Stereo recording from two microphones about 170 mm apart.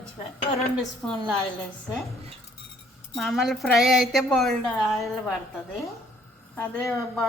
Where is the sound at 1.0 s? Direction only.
5° left (ahead or behind).